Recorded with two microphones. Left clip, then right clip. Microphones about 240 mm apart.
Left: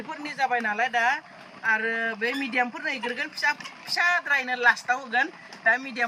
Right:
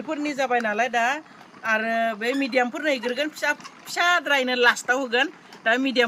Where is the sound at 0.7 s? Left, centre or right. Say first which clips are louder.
Right 1 dB; right.